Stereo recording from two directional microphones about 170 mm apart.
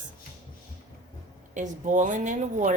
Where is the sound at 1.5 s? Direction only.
45° right (ahead or behind).